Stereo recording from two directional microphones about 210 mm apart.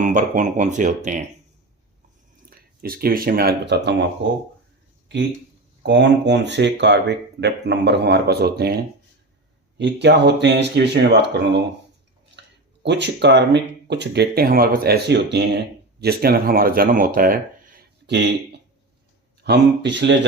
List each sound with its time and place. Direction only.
0.0 s speech: 35° right (ahead or behind)
2.5 s speech: 45° right (ahead or behind)
5.8 s speech: 55° right (ahead or behind)
9.7 s speech: 55° right (ahead or behind)
12.4 s a sound: 55° right (ahead or behind)
12.8 s speech: 55° right (ahead or behind)
19.4 s speech: 55° right (ahead or behind)